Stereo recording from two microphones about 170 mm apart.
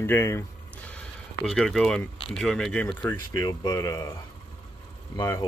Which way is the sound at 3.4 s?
25° left (ahead or behind).